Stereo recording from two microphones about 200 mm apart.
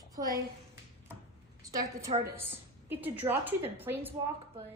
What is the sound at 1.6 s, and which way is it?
A woman's voice, 15° right (ahead or behind).